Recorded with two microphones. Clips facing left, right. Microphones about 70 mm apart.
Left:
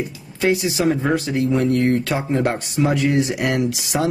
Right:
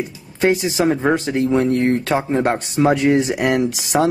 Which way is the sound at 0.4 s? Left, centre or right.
Right.